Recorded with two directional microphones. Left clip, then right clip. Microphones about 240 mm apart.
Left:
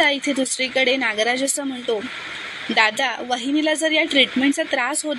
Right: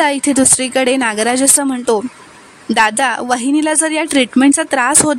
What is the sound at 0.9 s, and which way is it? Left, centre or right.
Speech, right.